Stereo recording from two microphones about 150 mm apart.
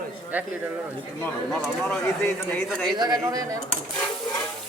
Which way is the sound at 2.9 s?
25° right (ahead or behind).